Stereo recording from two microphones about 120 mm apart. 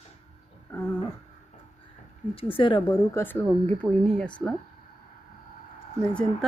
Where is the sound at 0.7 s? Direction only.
20° left (ahead or behind).